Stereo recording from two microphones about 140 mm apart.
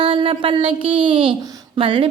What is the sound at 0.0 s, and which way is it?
Speech, 40° right (ahead or behind).